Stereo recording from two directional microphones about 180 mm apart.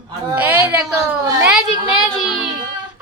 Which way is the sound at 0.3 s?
10° right (ahead or behind).